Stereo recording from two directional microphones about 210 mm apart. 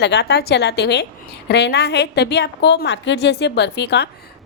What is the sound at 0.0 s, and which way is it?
A woman's voice, 55° left (ahead or behind).